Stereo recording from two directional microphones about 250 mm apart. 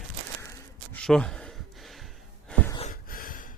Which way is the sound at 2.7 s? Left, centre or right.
Left.